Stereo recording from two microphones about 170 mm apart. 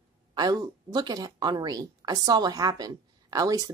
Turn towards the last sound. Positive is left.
turn(degrees=-20)  # may be behind; listen again after turning